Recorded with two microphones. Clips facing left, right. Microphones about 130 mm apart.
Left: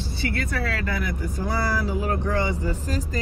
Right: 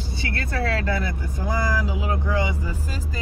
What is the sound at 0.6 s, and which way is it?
Speech, 25° right (ahead or behind).